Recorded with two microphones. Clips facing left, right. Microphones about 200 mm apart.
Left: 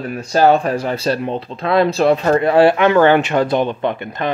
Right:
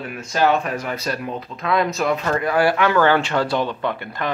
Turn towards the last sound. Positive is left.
turn(degrees=20)  # may be behind; listen again after turning